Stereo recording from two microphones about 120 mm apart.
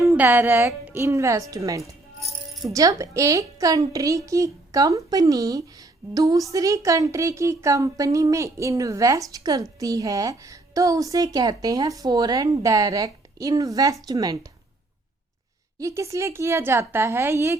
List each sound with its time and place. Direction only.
0.2 s speech: 15° right (ahead or behind)
15.8 s speech: 25° right (ahead or behind)